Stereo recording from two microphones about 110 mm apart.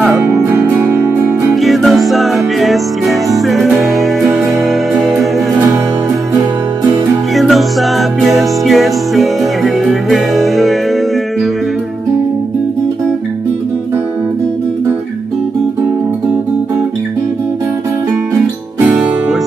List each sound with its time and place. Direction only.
0.2 s music: 20° right (ahead or behind)
1.5 s music: centre (ahead or behind)
7.3 s music: centre (ahead or behind)